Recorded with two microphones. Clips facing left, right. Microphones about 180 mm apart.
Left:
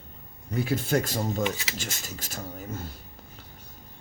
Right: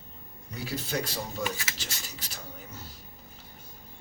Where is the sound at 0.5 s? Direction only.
55° left (ahead or behind).